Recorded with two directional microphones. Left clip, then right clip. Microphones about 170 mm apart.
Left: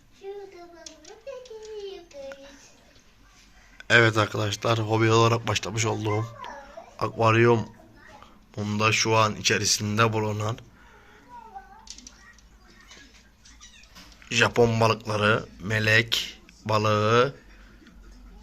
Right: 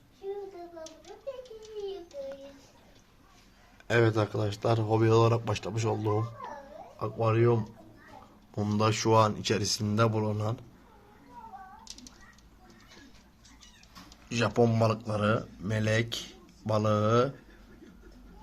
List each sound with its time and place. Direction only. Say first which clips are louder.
3.8 s speech: left 7 dB; 5° right (ahead or behind)
7.0 s speech: left 7 dB; 20° left (ahead or behind)
8.5 s speech: left 5 dB; 30° right (ahead or behind); by 10.6 s 10° right (ahead or behind)
14.3 s speech: left 6 dB; centre (ahead or behind)